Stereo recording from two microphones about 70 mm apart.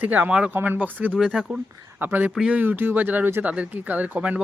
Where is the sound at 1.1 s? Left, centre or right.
Centre.